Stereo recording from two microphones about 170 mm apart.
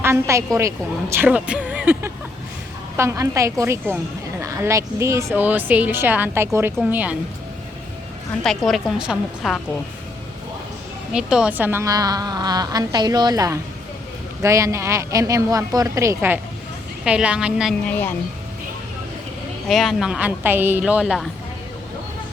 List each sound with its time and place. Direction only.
0.0 s a woman's voice: 15° right (ahead or behind)
8.3 s a woman's voice: centre (ahead or behind)
11.1 s a woman's voice: 5° right (ahead or behind)
17.8 s speech: 10° left (ahead or behind)
19.6 s a woman's voice: centre (ahead or behind)